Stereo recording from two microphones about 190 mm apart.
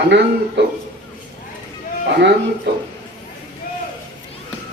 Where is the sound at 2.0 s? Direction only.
60° right (ahead or behind).